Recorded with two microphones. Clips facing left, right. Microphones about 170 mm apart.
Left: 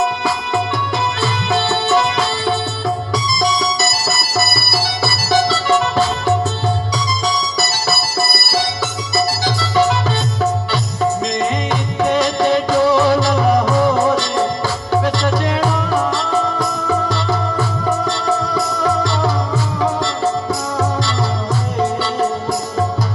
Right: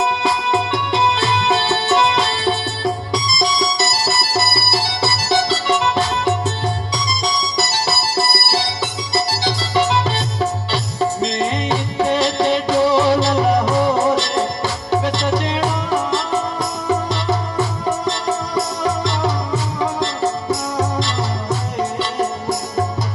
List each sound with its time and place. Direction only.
0.0 s music: 25° right (ahead or behind)
3.8 s music: 25° right (ahead or behind)
11.3 s music: 25° right (ahead or behind)